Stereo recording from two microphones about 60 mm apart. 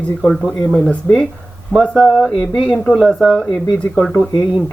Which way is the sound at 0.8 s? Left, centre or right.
Centre.